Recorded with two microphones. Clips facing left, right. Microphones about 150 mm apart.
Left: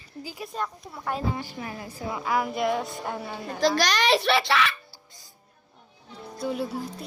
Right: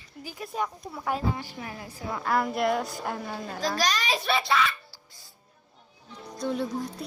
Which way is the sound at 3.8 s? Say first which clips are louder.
Left 5 dB; 75° left (ahead or behind).